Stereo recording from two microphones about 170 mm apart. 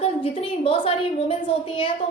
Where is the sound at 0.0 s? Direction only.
35° left (ahead or behind).